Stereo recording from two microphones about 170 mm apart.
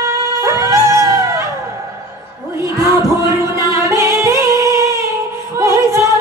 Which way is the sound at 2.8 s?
20° right (ahead or behind).